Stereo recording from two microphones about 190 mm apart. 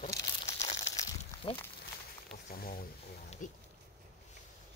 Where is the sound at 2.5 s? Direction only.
50° left (ahead or behind).